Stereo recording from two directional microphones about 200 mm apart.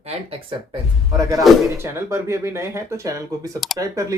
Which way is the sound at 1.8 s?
10° right (ahead or behind).